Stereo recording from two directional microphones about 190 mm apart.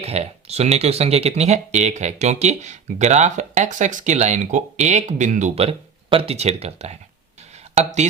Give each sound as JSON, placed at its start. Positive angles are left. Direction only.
{"t": 0.0, "sound": "speech", "side_deg": -35}